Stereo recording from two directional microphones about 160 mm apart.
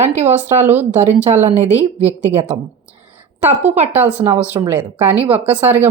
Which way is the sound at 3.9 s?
10° right (ahead or behind).